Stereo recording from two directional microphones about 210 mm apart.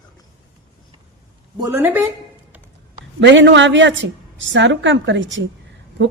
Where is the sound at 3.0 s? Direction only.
60° right (ahead or behind).